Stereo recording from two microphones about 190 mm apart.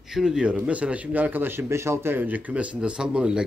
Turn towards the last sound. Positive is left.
turn(degrees=-5)  # may be behind; listen again after turning